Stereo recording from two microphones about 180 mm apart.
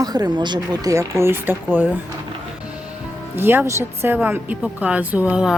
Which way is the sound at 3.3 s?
10° right (ahead or behind).